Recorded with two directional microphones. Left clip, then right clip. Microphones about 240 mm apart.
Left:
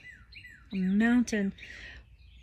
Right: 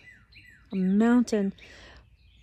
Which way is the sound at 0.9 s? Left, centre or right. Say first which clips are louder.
Right 4 dB; centre.